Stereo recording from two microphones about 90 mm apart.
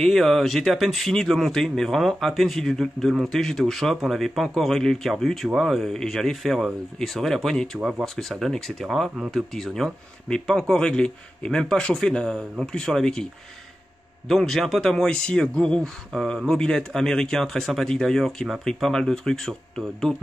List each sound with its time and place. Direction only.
0.0 s speech: 5° left (ahead or behind)